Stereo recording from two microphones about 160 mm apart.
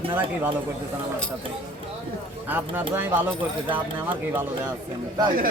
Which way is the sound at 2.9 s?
10° right (ahead or behind).